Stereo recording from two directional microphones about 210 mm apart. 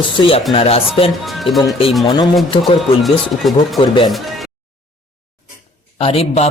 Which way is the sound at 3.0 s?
Centre (ahead or behind).